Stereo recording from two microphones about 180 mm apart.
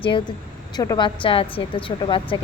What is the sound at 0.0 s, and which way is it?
A woman's voice, 30° left (ahead or behind).